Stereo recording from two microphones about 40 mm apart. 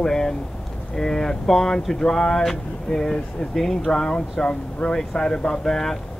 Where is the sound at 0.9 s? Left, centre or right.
Centre.